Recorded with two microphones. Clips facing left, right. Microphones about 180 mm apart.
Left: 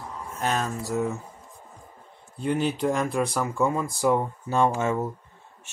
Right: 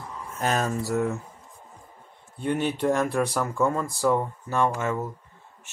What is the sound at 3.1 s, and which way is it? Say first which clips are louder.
Speech: even; 15° left (ahead or behind).